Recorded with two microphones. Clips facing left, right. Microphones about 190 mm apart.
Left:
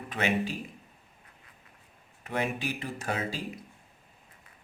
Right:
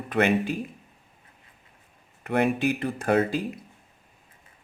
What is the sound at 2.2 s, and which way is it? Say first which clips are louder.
Speech: right 9 dB; 60° right (ahead or behind).